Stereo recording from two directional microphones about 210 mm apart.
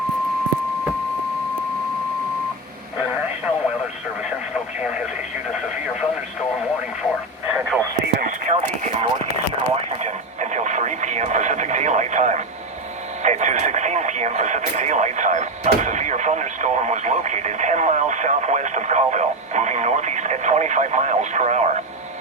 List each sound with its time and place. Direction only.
7.4 s radio: 10° right (ahead or behind)
8.4 s clip-clop: 35° right (ahead or behind)
9.7 s radio: 35° right (ahead or behind)